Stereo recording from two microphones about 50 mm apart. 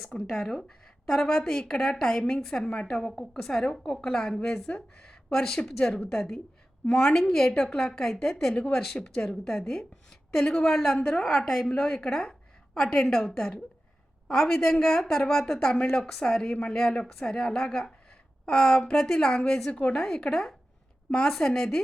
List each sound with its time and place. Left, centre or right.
0.1 s a woman's voice: centre
11.2 s a woman's voice: centre
11.7 s a woman's voice: centre